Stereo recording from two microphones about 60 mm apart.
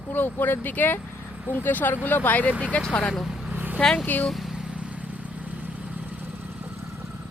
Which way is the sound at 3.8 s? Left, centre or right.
Centre.